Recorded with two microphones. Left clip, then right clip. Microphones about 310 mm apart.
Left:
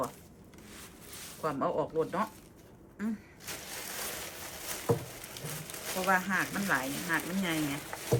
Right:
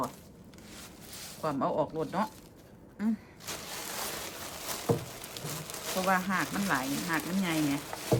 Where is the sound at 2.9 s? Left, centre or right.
Centre.